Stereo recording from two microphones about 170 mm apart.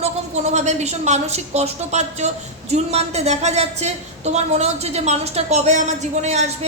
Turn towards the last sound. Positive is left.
turn(degrees=-40)  # may be behind; listen again after turning